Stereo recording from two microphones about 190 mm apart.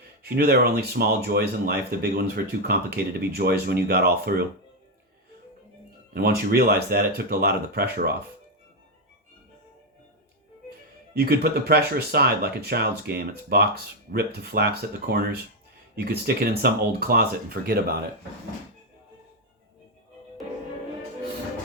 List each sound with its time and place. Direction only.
0.3 s speech: 55° right (ahead or behind)
6.1 s speech: 55° right (ahead or behind)
11.2 s speech: 50° right (ahead or behind)